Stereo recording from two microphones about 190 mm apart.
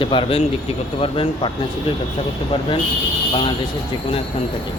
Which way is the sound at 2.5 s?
25° left (ahead or behind).